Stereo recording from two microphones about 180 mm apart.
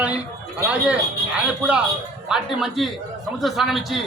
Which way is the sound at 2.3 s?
Centre (ahead or behind).